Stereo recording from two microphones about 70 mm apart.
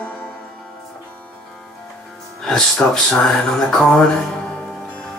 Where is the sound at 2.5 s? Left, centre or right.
Centre.